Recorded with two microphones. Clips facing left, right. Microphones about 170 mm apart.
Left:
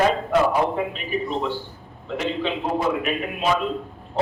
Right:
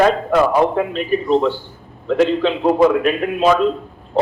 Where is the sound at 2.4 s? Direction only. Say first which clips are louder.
Right 8 dB; 90° right.